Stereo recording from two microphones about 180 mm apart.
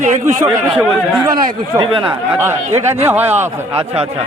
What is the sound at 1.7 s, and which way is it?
Speech, 25° right (ahead or behind).